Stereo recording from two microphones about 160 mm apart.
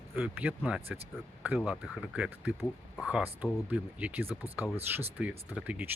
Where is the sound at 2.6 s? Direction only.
5° right (ahead or behind).